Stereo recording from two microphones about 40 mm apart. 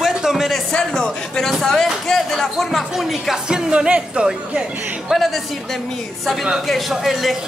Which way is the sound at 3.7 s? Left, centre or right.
Right.